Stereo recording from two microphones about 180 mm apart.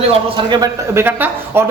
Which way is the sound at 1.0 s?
10° right (ahead or behind).